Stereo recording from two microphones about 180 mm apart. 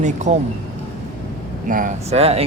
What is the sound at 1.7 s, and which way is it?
Speech, 45° right (ahead or behind).